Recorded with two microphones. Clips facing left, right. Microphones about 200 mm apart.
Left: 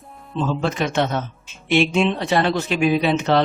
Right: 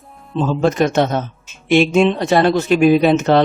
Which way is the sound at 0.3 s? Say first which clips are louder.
Right 6 dB; 45° right (ahead or behind).